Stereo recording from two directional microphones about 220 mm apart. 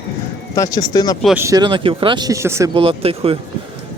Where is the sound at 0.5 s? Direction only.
15° left (ahead or behind).